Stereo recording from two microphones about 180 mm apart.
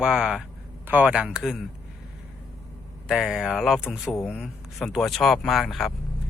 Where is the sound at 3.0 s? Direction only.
5° right (ahead or behind).